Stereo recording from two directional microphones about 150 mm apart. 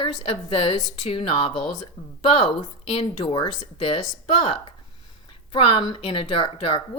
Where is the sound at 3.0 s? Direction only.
40° left (ahead or behind).